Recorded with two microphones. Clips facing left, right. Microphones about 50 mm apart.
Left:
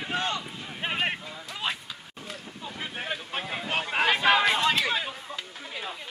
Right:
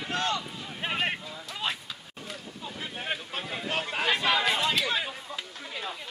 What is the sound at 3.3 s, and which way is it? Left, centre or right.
Boat, centre.